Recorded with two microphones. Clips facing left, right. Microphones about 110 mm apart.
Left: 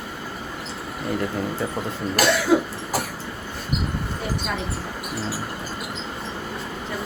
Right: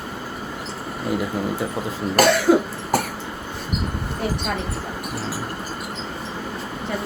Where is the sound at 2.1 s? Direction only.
55° right (ahead or behind).